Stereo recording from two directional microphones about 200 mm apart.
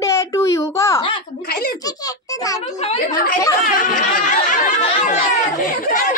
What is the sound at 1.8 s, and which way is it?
Speech, 20° left (ahead or behind).